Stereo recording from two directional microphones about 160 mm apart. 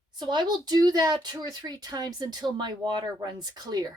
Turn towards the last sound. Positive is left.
turn(degrees=-25)  # may be behind; listen again after turning